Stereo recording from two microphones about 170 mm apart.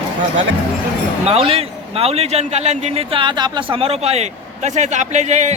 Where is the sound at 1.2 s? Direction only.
35° right (ahead or behind).